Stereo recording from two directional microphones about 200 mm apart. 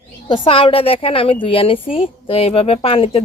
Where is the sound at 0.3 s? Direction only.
30° left (ahead or behind).